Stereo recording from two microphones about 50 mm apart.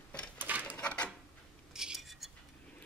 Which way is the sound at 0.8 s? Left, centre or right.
Left.